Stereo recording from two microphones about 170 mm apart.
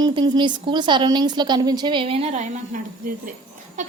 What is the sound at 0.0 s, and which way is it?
A woman's voice, 30° right (ahead or behind).